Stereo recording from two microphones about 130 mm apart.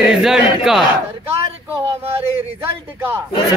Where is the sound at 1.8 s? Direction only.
50° right (ahead or behind).